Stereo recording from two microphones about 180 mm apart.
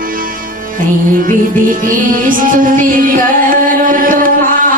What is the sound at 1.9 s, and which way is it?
Music, 50° right (ahead or behind).